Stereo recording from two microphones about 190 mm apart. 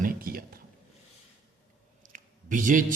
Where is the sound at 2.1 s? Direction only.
45° right (ahead or behind).